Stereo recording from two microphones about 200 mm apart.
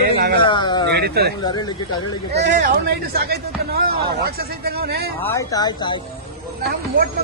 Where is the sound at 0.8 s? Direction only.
55° right (ahead or behind).